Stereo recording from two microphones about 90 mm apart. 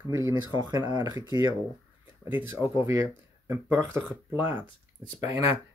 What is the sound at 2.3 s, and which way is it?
Speech, 20° right (ahead or behind).